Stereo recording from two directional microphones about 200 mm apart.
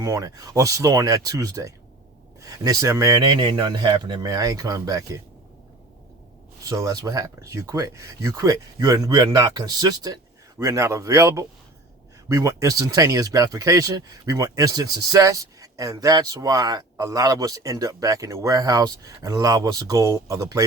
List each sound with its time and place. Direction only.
0.0 s speech: 15° right (ahead or behind)
6.7 s speech: 20° right (ahead or behind)